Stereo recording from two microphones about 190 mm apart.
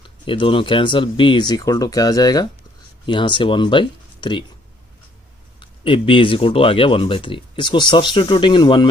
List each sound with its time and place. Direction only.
0.0 s speech: 25° left (ahead or behind)
5.5 s speech: 25° left (ahead or behind)